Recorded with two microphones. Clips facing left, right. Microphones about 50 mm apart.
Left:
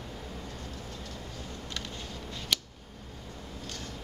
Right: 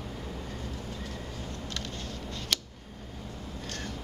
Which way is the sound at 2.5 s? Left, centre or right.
Centre.